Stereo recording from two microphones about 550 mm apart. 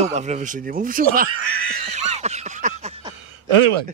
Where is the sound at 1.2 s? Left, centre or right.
Right.